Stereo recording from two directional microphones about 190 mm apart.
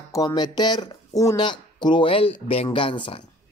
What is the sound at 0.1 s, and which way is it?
Speech, 20° left (ahead or behind).